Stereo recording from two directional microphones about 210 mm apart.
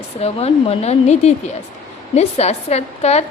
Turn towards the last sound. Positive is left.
turn(degrees=30)  # may be behind; listen again after turning